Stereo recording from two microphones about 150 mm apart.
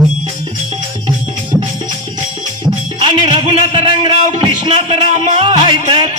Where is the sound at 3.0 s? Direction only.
35° right (ahead or behind).